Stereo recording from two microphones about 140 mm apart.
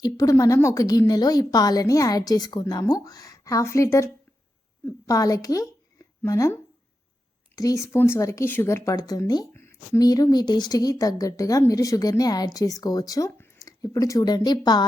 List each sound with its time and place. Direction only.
0.0 s a woman's voice: 25° left (ahead or behind)